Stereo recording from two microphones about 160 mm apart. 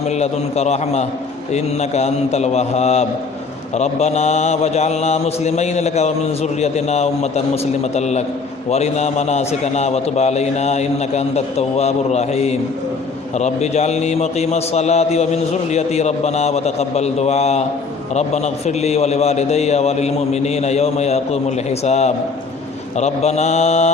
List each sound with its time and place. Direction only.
0.1 s mantra: 45° left (ahead or behind)
1.5 s a man's voice: 40° left (ahead or behind)
3.8 s mantra: 45° left (ahead or behind)